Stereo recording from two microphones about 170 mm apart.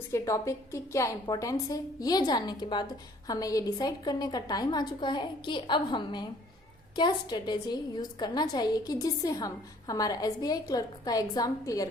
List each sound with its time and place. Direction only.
0.1 s a woman's voice: 15° left (ahead or behind)